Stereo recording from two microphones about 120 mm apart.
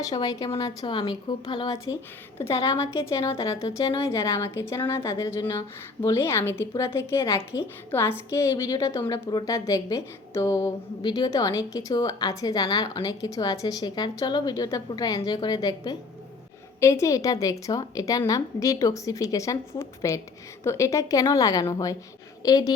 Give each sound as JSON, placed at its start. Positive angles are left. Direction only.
{"t": 0.0, "sound": "a woman's voice", "side_deg": 30}
{"t": 2.4, "sound": "a woman's voice", "side_deg": 25}
{"t": 4.0, "sound": "a woman's voice", "side_deg": 25}